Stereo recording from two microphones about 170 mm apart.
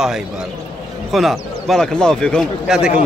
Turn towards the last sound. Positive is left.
turn(degrees=-5)  # may be behind; listen again after turning